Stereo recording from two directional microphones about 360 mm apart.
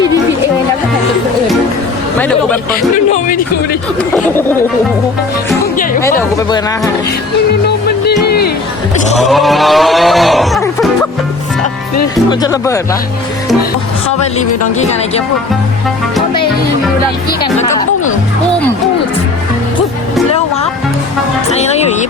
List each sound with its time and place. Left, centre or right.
2.1 s cattle: centre
3.1 s speech: left
6.0 s speech: centre
7.9 s music: left
9.1 s cattle: centre
12.3 s speech: centre
14.3 s speech: centre
17.6 s music: centre
21.5 s music: centre